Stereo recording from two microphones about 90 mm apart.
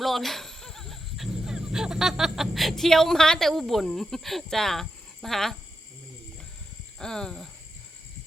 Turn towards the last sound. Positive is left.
turn(degrees=5)  # may be behind; listen again after turning